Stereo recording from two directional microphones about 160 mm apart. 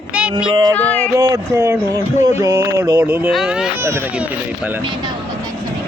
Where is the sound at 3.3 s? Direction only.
Centre (ahead or behind).